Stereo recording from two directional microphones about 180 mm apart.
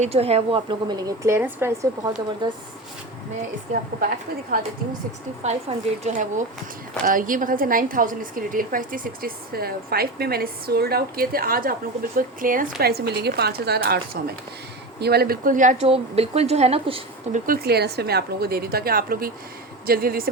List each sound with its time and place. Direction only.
0.0 s a woman's voice: 35° right (ahead or behind); by 1.9 s 15° right (ahead or behind)
2.4 s a woman's voice: 25° right (ahead or behind)
5.4 s a woman's voice: 40° right (ahead or behind)
12.8 s a woman's voice: 65° right (ahead or behind); by 17.4 s 35° right (ahead or behind)
17.4 s a woman's voice: 55° right (ahead or behind)